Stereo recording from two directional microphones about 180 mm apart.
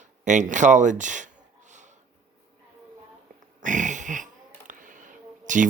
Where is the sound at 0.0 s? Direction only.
45° right (ahead or behind).